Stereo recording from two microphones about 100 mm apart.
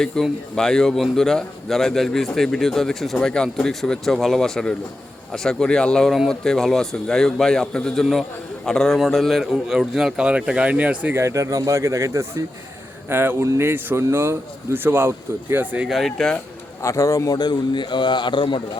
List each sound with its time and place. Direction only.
0.0 s speech: 5° left (ahead or behind); by 11.1 s 15° right (ahead or behind)
11.1 s speech: 30° right (ahead or behind)
15.9 s speech: centre (ahead or behind)
16.8 s a man's voice: 30° left (ahead or behind); by 18.6 s 55° left (ahead or behind)